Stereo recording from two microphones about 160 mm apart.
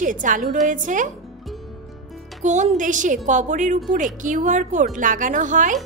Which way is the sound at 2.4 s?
50° right (ahead or behind).